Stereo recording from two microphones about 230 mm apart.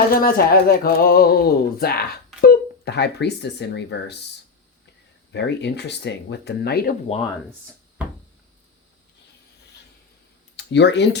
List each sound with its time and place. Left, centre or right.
0.1 s speech: left
5.3 s speech: left
10.6 s speech: left